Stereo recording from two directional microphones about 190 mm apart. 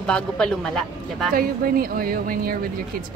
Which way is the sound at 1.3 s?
50° right (ahead or behind).